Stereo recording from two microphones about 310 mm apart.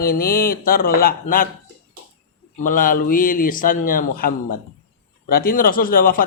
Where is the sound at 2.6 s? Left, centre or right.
Left.